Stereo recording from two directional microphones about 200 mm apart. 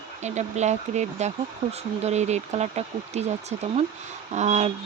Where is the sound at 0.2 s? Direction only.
35° right (ahead or behind).